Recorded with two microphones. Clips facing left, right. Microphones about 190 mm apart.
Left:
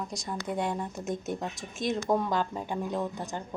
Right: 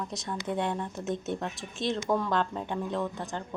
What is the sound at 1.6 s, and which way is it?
Speech, 15° left (ahead or behind).